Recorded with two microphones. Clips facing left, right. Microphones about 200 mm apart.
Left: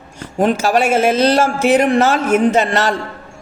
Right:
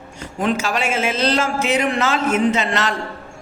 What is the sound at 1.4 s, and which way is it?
A woman's voice, 50° left (ahead or behind).